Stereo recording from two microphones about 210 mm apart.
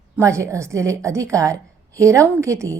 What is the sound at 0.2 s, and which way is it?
A woman's voice, 15° right (ahead or behind).